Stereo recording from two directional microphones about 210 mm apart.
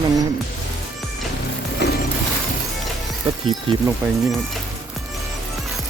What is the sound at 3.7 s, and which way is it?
Speech, 25° right (ahead or behind).